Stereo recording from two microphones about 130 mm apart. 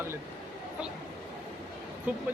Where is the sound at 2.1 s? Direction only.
10° right (ahead or behind).